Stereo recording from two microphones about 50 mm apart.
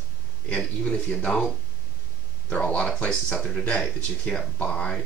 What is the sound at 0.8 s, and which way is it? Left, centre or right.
Speech, left.